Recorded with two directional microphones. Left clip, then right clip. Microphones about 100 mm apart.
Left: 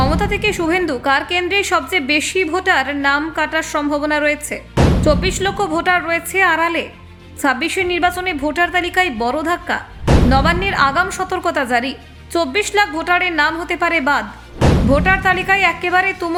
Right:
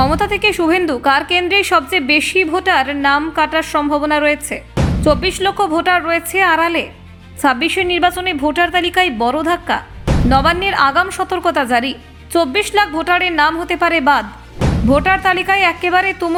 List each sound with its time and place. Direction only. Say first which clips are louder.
0.0 s a woman's voice: right 3 dB; 35° right (ahead or behind)